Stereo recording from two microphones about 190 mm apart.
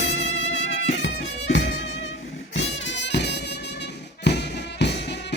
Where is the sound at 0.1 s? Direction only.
75° left (ahead or behind).